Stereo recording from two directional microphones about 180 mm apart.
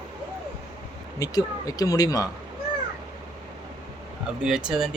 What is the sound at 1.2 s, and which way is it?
Speech, 20° left (ahead or behind).